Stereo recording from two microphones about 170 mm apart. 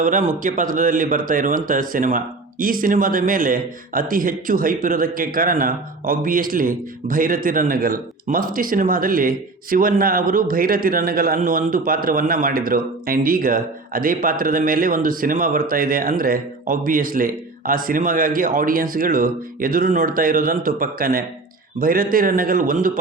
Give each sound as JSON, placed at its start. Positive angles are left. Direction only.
{"t": 0.0, "sound": "speech", "side_deg": -45}